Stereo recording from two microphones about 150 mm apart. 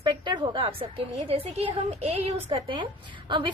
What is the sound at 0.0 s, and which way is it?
A woman's voice, 30° right (ahead or behind).